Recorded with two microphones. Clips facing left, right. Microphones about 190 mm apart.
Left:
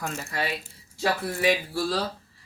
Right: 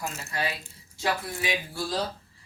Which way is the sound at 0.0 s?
55° left (ahead or behind).